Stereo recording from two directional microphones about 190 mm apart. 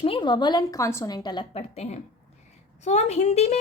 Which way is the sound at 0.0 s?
25° left (ahead or behind).